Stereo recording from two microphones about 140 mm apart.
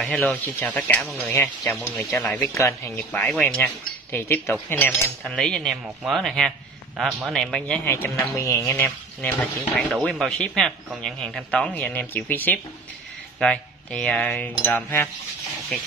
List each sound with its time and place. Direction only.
0.0 s speech: centre (ahead or behind)
1.0 s speech: centre (ahead or behind)
1.3 s speech: 15° left (ahead or behind)
7.9 s speech: 20° left (ahead or behind)